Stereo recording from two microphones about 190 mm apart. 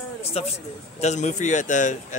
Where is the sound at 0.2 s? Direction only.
35° left (ahead or behind).